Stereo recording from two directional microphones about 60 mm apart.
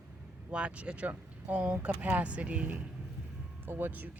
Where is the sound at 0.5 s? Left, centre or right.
Centre.